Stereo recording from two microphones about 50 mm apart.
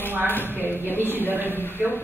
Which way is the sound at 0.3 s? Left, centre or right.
Left.